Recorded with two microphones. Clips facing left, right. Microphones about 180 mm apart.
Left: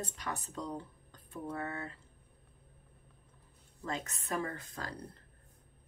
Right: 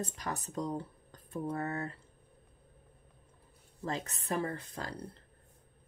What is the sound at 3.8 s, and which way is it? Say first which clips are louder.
Speech: right 3 dB; 35° right (ahead or behind).